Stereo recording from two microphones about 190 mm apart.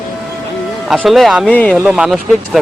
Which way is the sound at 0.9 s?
Centre (ahead or behind).